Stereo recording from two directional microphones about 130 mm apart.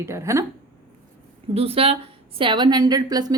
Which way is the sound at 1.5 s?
50° right (ahead or behind).